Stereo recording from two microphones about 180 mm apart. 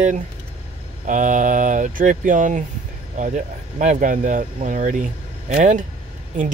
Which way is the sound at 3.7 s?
45° right (ahead or behind).